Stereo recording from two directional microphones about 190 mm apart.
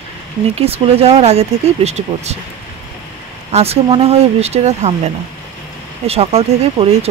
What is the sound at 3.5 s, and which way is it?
Speech, 30° right (ahead or behind).